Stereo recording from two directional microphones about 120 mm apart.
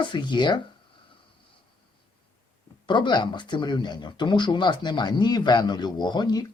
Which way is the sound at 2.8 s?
40° left (ahead or behind).